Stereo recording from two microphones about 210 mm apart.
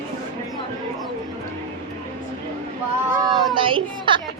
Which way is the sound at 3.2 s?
20° right (ahead or behind).